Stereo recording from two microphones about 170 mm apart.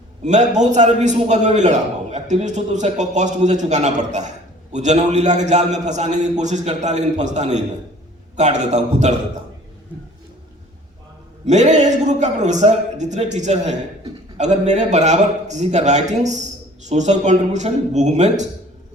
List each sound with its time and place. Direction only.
0.3 s a man's voice: 45° right (ahead or behind)
11.4 s a man's voice: 45° right (ahead or behind)